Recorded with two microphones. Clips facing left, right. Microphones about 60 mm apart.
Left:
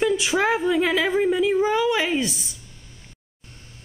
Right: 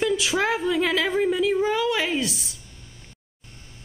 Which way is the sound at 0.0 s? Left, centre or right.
Centre.